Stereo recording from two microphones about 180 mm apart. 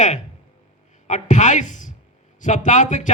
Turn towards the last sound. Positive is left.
turn(degrees=45)  # may be behind; listen again after turning